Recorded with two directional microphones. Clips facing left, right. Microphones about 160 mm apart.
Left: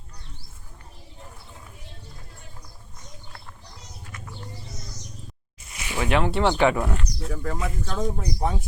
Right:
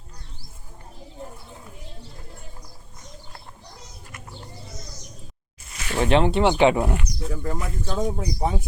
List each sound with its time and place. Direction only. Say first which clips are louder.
6.0 s speech: right 4 dB; 25° right (ahead or behind)
7.2 s speech: even; centre (ahead or behind)